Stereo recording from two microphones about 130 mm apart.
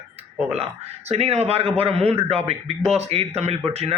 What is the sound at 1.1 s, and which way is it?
Speech, 55° right (ahead or behind).